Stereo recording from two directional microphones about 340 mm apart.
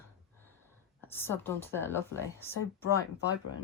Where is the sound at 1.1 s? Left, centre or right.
Centre.